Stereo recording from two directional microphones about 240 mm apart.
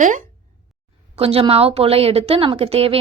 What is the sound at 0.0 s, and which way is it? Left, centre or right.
A woman's voice, right.